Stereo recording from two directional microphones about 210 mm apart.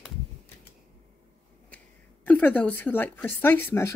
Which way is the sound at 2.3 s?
10° left (ahead or behind).